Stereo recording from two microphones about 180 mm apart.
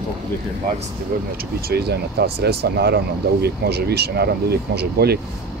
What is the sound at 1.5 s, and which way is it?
Speech, 60° right (ahead or behind).